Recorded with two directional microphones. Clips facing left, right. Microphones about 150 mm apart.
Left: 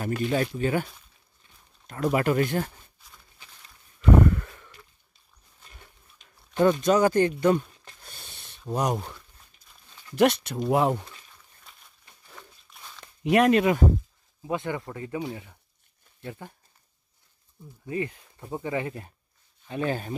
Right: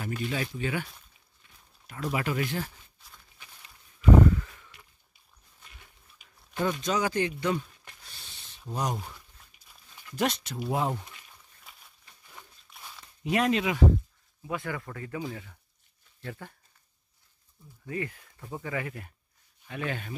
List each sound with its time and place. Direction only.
0.0 s speech: 45° left (ahead or behind)
1.9 s speech: 50° left (ahead or behind)
4.1 s a sound: 55° left (ahead or behind)
5.6 s dog: 40° left (ahead or behind)
6.2 s a sound: 5° right (ahead or behind)
6.6 s speech: 55° left (ahead or behind)
8.0 s a sound: 50° left (ahead or behind)
10.1 s speech: 65° left (ahead or behind)
12.6 s a sound: 5° right (ahead or behind)
13.0 s speech: 65° left (ahead or behind)
14.4 s speech: 25° left (ahead or behind)
17.8 s speech: 20° left (ahead or behind)